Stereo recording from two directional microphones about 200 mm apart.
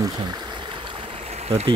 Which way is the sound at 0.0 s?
20° right (ahead or behind).